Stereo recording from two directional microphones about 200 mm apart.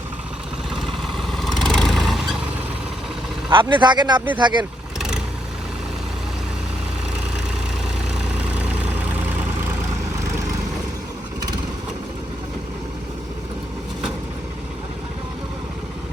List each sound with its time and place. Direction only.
0.7 s vehicle: centre (ahead or behind)
3.5 s speech: 25° right (ahead or behind)
4.9 s vehicle: 5° right (ahead or behind)